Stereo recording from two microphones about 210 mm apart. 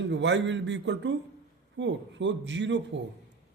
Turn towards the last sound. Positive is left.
turn(degrees=-60)  # may be behind; listen again after turning